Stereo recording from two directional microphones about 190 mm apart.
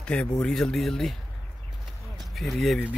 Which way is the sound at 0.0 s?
5° left (ahead or behind).